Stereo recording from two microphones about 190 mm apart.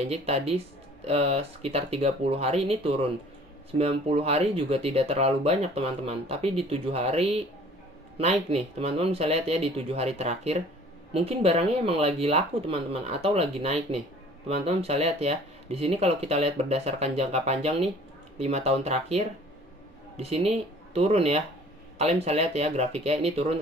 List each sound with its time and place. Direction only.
0.0 s speech: 35° right (ahead or behind)